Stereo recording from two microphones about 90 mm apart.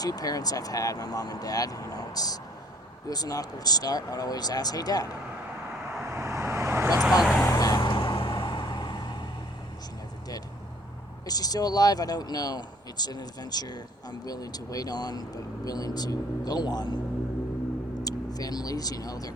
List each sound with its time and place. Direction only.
0.0 s speech: 45° left (ahead or behind)
6.1 s vehicle: 30° right (ahead or behind)
7.0 s vehicle: 5° right (ahead or behind)
7.4 s vehicle: 40° left (ahead or behind)
7.9 s vehicle: 70° left (ahead or behind)
11.3 s speech: 45° left (ahead or behind)
18.0 s speech: 45° left (ahead or behind)